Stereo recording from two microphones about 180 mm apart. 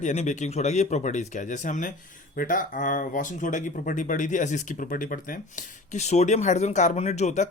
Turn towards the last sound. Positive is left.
turn(degrees=40)  # may be behind; listen again after turning